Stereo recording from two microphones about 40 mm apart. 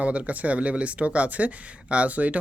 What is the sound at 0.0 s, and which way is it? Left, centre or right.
Speech, right.